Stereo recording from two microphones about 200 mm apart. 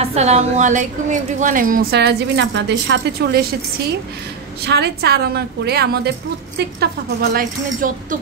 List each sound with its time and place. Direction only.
0.0 s a woman's voice: 30° right (ahead or behind); by 3.4 s 55° right (ahead or behind)
4.6 s a woman's voice: 55° right (ahead or behind)